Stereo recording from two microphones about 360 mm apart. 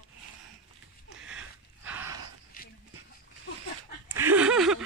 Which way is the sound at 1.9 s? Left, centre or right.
Centre.